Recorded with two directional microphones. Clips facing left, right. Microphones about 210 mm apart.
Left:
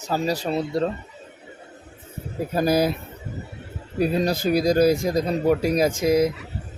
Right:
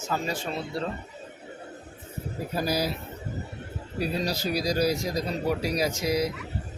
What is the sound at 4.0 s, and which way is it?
Speech, 50° left (ahead or behind).